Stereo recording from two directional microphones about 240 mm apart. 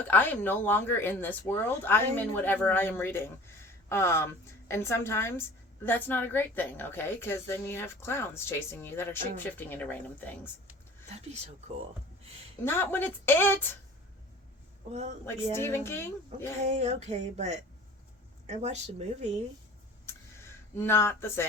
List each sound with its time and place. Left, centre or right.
0.0 s speech: centre
12.6 s speech: centre
15.5 s speech: centre
16.6 s speech: right
20.1 s a sound: centre